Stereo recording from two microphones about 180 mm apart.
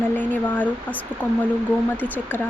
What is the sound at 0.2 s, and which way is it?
Speech, 10° left (ahead or behind).